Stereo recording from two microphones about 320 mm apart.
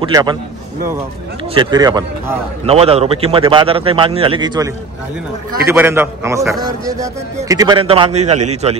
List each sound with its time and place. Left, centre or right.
0.0 s a man's voice: centre
1.5 s a man's voice: centre